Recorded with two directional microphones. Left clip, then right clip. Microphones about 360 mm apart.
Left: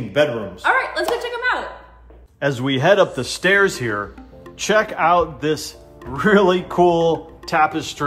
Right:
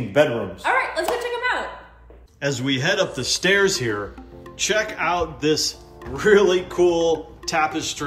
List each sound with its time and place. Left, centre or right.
0.2 s a man's voice: centre
0.6 s a woman's voice: centre